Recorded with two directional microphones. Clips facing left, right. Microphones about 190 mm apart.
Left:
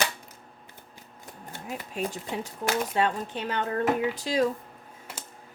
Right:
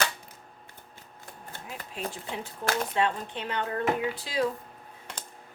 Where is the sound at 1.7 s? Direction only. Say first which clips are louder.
Left 5 dB; 45° left (ahead or behind).